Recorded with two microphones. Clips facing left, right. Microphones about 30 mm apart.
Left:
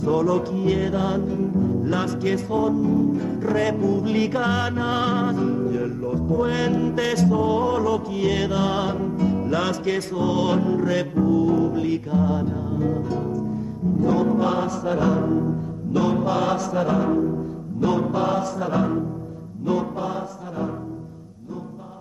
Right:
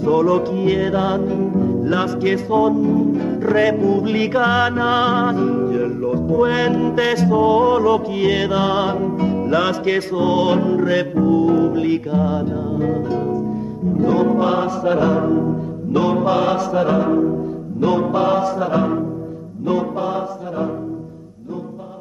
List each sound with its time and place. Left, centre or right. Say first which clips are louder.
0.0 s music: right 5 dB; right